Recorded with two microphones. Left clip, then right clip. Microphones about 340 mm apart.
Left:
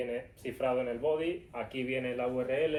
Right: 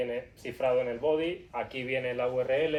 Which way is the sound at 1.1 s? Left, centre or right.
Centre.